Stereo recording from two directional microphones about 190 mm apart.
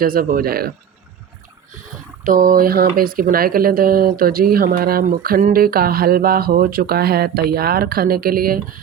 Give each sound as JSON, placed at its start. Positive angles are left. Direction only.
{"t": 0.0, "sound": "speech", "side_deg": -50}
{"t": 2.2, "sound": "speech", "side_deg": -45}